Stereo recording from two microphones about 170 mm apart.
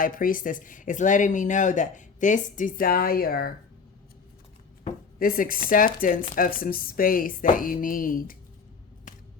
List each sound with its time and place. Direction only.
0.0 s speech: 55° left (ahead or behind)
5.2 s speech: 55° left (ahead or behind)
9.1 s a sound: 50° left (ahead or behind)